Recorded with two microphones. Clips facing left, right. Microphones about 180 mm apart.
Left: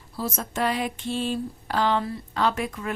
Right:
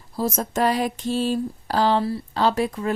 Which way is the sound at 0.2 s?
40° right (ahead or behind).